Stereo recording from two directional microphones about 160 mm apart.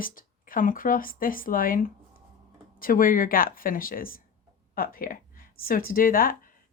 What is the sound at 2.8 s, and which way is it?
Speech, 60° left (ahead or behind).